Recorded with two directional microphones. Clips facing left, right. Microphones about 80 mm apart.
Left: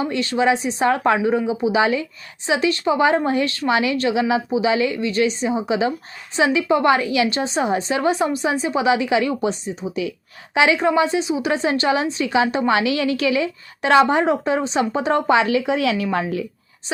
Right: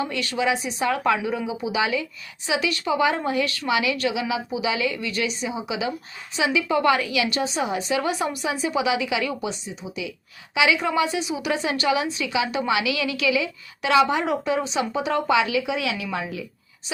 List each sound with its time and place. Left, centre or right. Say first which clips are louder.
0.0 s a woman's voice: left 5 dB; left